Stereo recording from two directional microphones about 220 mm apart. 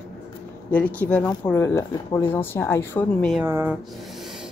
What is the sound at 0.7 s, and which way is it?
Speech, 5° left (ahead or behind).